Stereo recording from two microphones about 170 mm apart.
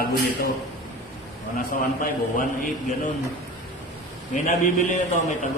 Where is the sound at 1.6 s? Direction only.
55° left (ahead or behind).